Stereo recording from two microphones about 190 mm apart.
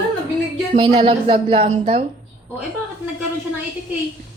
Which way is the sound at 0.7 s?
35° right (ahead or behind).